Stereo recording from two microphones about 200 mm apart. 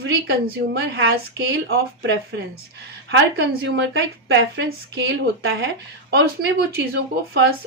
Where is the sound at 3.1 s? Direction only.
60° right (ahead or behind).